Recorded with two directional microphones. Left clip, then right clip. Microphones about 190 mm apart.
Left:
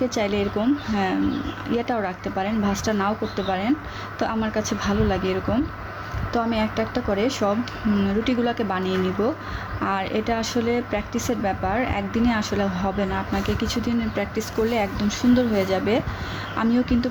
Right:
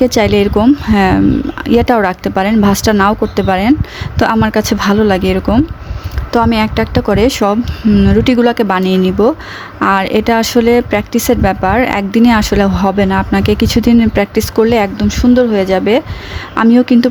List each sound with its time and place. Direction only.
0.0 s speech: 55° right (ahead or behind)